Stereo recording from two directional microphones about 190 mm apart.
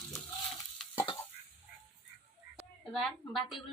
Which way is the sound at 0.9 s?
20° left (ahead or behind).